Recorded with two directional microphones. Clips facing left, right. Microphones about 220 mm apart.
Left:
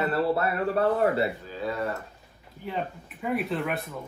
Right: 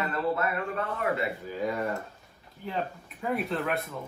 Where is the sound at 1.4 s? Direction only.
15° right (ahead or behind).